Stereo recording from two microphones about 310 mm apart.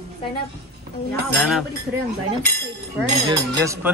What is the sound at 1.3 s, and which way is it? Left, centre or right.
Speech, centre.